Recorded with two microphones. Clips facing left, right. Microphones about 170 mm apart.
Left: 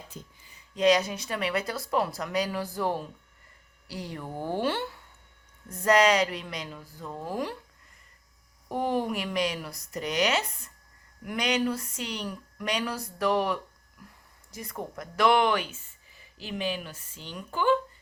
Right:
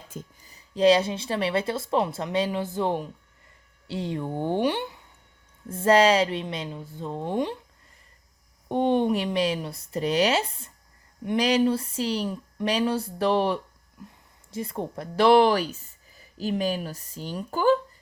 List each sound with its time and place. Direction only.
0.1 s speech: 45° right (ahead or behind); by 4.9 s 15° right (ahead or behind)
5.6 s speech: 30° right (ahead or behind)
8.7 s speech: 25° right (ahead or behind)